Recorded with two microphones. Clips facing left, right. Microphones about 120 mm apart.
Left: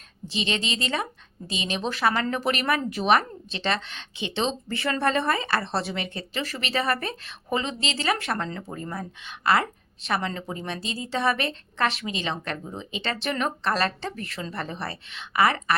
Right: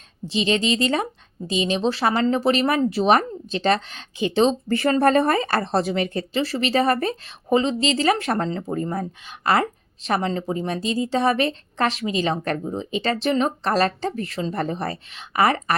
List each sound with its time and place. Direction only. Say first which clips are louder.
0.3 s speech: right 8 dB; 35° right (ahead or behind)